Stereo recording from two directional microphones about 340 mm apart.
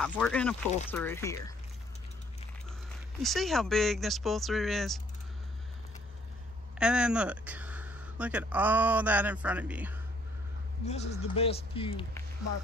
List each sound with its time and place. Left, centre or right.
0.0 s speech: centre
3.2 s speech: centre
6.8 s speech: centre
10.9 s speech: centre